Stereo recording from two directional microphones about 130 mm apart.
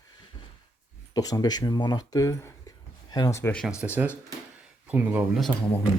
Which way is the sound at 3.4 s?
10° left (ahead or behind).